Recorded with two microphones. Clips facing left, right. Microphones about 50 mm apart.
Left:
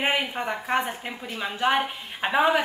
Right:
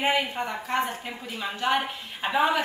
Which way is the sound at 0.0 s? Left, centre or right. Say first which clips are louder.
Even; left.